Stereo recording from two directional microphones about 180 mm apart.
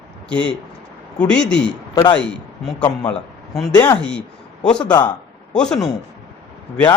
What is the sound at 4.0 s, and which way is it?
Speech, 5° left (ahead or behind).